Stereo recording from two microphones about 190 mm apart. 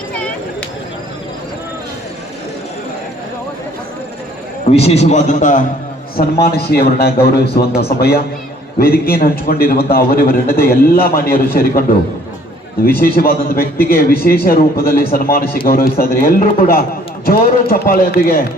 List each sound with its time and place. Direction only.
4.7 s a man's voice: 30° left (ahead or behind)
6.1 s a man's voice: 55° left (ahead or behind)
13.0 s a man's voice: 50° left (ahead or behind)